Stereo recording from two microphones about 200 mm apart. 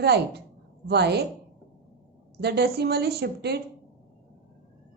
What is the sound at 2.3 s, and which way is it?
A woman's voice, 55° right (ahead or behind).